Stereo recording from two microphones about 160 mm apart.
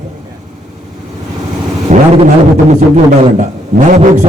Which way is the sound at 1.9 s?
50° right (ahead or behind).